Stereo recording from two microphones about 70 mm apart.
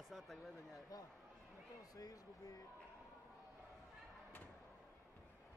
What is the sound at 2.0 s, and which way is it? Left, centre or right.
Speech, left.